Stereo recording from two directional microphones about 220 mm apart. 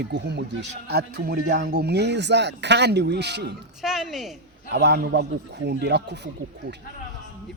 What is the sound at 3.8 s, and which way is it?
Speech, centre (ahead or behind).